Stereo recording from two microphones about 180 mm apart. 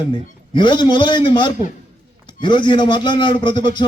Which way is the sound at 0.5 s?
25° left (ahead or behind).